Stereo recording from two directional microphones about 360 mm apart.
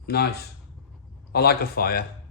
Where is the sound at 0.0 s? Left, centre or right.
Left.